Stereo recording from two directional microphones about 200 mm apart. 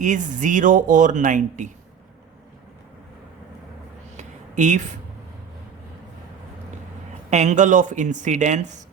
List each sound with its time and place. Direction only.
0.0 s speech: 40° right (ahead or behind)
4.2 s a sound: 40° right (ahead or behind)
7.3 s speech: 35° right (ahead or behind)